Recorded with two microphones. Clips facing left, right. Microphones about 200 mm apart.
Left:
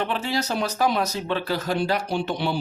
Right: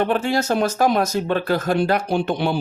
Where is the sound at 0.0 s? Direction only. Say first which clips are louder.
Right 6 dB; 50° right (ahead or behind).